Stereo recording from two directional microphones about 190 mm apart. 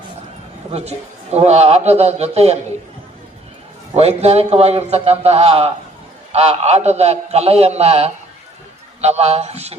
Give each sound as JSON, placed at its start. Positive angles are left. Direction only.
{"t": 0.7, "sound": "a man's voice", "side_deg": -35}
{"t": 3.9, "sound": "a man's voice", "side_deg": -35}